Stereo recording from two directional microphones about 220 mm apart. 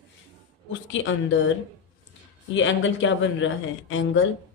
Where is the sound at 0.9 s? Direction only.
60° left (ahead or behind).